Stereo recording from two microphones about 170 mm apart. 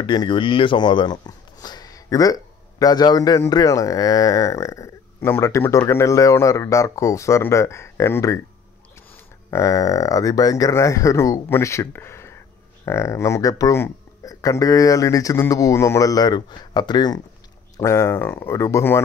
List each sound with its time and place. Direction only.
0.0 s speech: 25° left (ahead or behind)